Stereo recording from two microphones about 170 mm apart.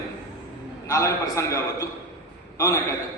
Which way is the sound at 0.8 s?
20° left (ahead or behind).